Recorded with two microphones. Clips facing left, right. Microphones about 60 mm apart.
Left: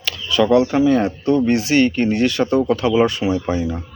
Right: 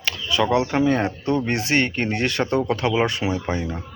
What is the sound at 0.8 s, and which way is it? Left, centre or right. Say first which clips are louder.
Speech: left 4 dB; right.